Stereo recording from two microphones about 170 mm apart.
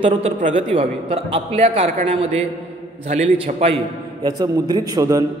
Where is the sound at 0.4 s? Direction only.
45° right (ahead or behind).